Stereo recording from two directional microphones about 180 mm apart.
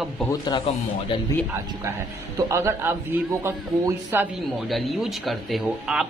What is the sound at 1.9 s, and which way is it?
A man's voice, 15° right (ahead or behind).